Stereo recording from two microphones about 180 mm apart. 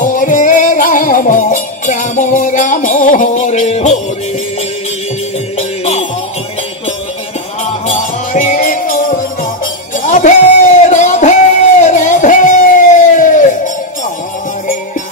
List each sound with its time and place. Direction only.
0.0 s music: 45° left (ahead or behind)
5.6 s music: 35° left (ahead or behind)
7.8 s music: 40° left (ahead or behind)
10.0 s a sound: 40° left (ahead or behind)